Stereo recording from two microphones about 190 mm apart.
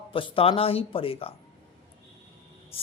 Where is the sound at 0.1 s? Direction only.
25° left (ahead or behind).